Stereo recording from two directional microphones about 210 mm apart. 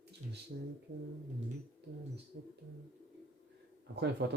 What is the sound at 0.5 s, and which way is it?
Speech, 60° right (ahead or behind).